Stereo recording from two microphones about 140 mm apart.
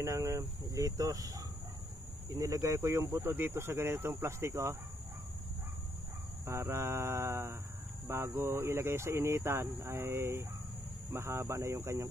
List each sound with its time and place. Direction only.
0.0 s speech: 25° right (ahead or behind)
6.4 s speech: 20° right (ahead or behind)